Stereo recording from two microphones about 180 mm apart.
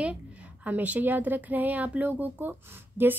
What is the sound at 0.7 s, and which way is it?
A woman's voice, 10° right (ahead or behind).